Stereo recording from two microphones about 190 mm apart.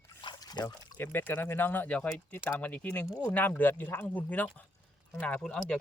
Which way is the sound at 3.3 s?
10° left (ahead or behind).